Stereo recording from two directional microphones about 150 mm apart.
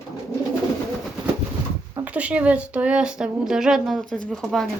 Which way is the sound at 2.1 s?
10° right (ahead or behind).